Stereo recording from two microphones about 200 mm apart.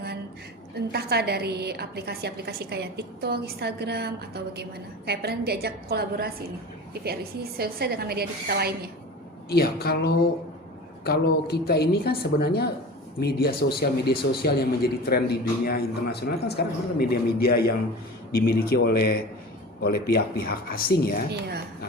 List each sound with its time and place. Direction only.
0.9 s a woman's voice: 55° right (ahead or behind)
9.5 s a man's voice: 50° left (ahead or behind)